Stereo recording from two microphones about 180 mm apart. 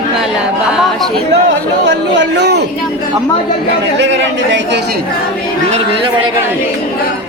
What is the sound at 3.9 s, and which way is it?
Speech, 85° right.